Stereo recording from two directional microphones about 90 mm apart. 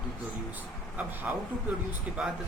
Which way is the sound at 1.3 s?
10° right (ahead or behind).